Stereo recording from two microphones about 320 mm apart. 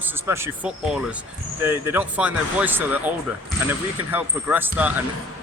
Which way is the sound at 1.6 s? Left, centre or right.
Centre.